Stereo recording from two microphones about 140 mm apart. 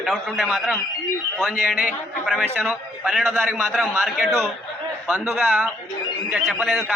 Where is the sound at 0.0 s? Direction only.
Centre (ahead or behind).